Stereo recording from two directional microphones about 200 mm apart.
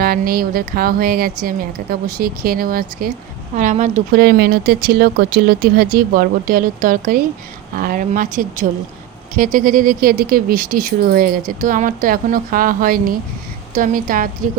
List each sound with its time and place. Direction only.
0.0 s a woman's voice: 50° right (ahead or behind)
4.1 s speech: 55° right (ahead or behind)